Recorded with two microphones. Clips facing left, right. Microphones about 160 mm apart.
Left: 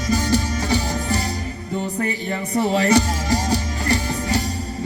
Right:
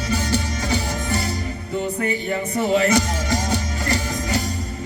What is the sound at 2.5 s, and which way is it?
Music, 35° left (ahead or behind).